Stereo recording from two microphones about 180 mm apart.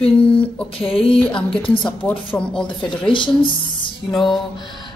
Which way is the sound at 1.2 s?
5° left (ahead or behind).